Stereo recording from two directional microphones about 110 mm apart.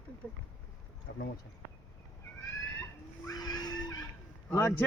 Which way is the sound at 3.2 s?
35° left (ahead or behind).